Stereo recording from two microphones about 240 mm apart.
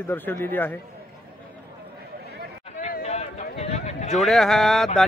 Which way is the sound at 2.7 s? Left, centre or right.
Left.